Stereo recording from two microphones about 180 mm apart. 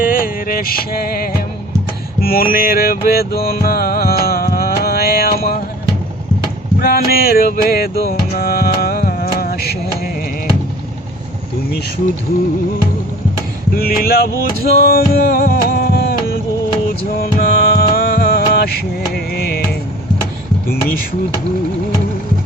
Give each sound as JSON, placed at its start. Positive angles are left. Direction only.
{"t": 0.0, "sound": "a sound", "side_deg": 50}
{"t": 2.2, "sound": "music", "side_deg": 55}
{"t": 6.7, "sound": "speech", "side_deg": 55}
{"t": 7.5, "sound": "music", "side_deg": 55}
{"t": 13.7, "sound": "a sound", "side_deg": 55}
{"t": 14.8, "sound": "music", "side_deg": 55}